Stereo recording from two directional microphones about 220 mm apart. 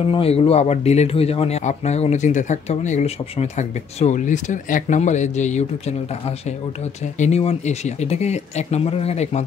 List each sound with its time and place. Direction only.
0.1 s speech: 25° left (ahead or behind)